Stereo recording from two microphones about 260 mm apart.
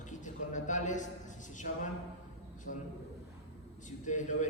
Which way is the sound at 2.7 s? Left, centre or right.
Left.